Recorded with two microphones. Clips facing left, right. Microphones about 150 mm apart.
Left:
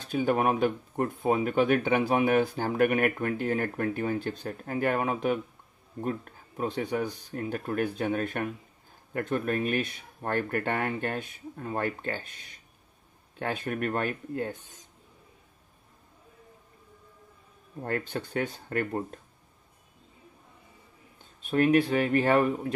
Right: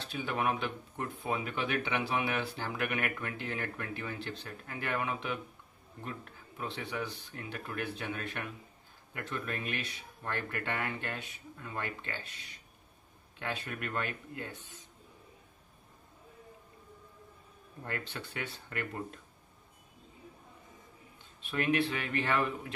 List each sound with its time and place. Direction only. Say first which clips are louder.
0.0 s speech: left 8 dB; 45° left (ahead or behind)
17.8 s speech: left 9 dB; 45° left (ahead or behind)
21.4 s speech: left 8 dB; 45° left (ahead or behind)